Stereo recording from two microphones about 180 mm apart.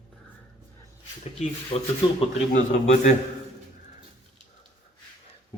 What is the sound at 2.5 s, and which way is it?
Speech, 45° left (ahead or behind).